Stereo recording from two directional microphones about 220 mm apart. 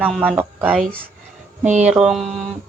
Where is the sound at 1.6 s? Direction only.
35° right (ahead or behind).